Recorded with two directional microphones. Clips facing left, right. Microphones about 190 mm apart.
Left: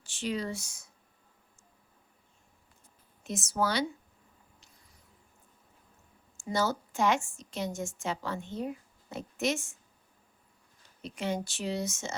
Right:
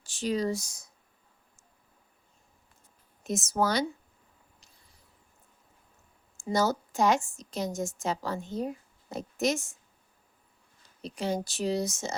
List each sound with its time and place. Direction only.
0.0 s speech: 40° right (ahead or behind)
3.2 s speech: 45° right (ahead or behind)
6.3 s a woman's voice: 40° right (ahead or behind)
11.0 s a woman's voice: 35° right (ahead or behind)